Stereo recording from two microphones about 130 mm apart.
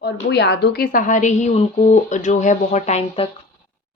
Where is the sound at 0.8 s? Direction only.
90° left; by 3.3 s 50° left (ahead or behind).